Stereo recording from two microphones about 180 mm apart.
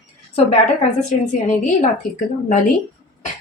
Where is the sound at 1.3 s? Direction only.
45° left (ahead or behind).